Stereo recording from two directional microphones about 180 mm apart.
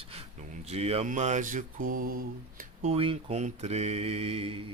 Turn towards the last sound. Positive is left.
turn(degrees=-35)  # may be behind; listen again after turning